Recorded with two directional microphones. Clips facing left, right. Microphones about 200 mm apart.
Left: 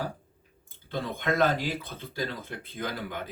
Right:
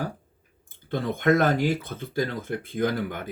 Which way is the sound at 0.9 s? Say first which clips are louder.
Right 7 dB; 50° right (ahead or behind).